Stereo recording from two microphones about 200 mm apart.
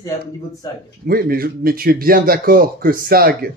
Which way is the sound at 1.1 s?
50° right (ahead or behind).